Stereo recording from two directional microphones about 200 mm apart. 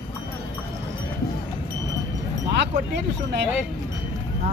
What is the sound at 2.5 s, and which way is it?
Speech, 60° right (ahead or behind).